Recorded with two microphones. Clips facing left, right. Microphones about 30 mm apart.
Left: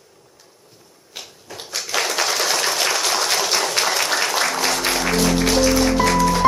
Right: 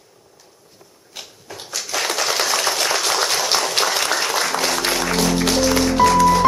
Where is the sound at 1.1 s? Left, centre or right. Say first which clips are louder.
Even; centre.